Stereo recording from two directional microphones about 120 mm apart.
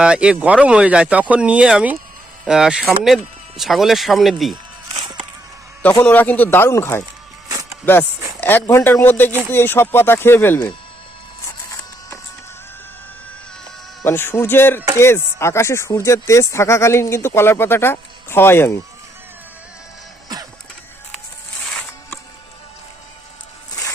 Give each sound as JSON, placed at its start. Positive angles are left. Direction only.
{"t": 0.0, "sound": "speech", "side_deg": -5}
{"t": 6.0, "sound": "speech", "side_deg": 15}
{"t": 7.4, "sound": "music", "side_deg": -30}
{"t": 8.4, "sound": "speech", "side_deg": 15}
{"t": 14.0, "sound": "speech", "side_deg": 20}
{"t": 21.7, "sound": "music", "side_deg": 5}